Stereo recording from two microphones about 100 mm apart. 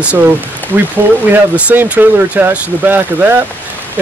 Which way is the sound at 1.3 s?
15° right (ahead or behind).